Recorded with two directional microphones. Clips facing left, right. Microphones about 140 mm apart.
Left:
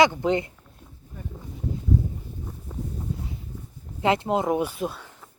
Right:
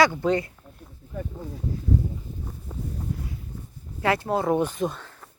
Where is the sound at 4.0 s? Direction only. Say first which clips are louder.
Left 1 dB; 20° left (ahead or behind).